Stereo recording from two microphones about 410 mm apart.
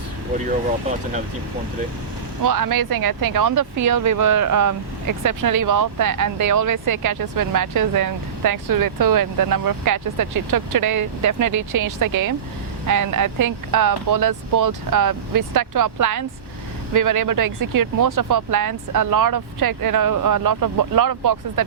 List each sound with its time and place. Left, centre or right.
2.4 s speech: right